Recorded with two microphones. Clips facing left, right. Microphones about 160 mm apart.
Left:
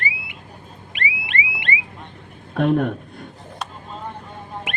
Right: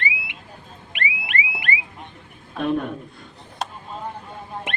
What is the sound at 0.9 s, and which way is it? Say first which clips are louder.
Car alarm: even; 30° left (ahead or behind).